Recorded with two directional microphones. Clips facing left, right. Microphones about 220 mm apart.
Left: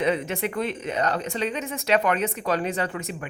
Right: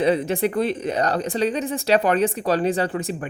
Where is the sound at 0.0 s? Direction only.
35° right (ahead or behind).